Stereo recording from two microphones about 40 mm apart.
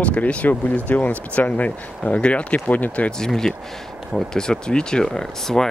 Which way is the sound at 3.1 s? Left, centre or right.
Centre.